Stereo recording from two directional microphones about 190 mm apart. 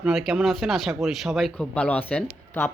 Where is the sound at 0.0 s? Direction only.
Centre (ahead or behind).